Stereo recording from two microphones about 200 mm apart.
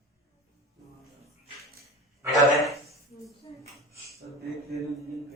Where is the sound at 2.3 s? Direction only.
Centre (ahead or behind).